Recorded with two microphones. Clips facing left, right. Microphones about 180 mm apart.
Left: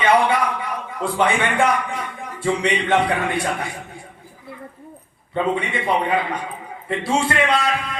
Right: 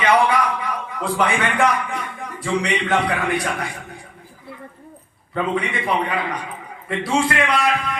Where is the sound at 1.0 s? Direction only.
25° left (ahead or behind).